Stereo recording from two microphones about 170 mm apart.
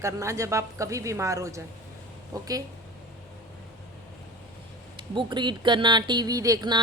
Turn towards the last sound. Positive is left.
turn(degrees=-25)  # may be behind; listen again after turning